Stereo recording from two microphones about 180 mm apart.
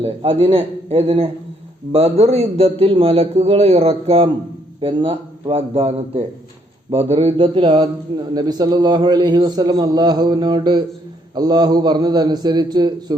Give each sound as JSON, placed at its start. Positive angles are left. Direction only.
{"t": 0.0, "sound": "a man's voice", "side_deg": -30}